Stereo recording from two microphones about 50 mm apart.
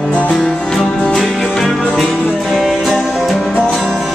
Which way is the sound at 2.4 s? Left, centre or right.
Centre.